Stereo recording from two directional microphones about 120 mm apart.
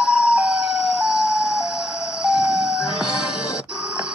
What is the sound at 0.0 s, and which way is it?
Emergency vehicle, 5° right (ahead or behind).